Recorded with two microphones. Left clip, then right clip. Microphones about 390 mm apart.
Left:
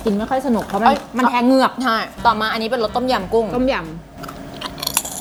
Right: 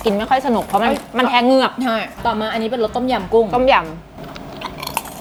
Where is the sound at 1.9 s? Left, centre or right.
Left.